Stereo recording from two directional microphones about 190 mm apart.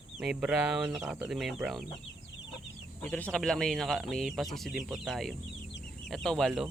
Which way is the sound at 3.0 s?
5° left (ahead or behind).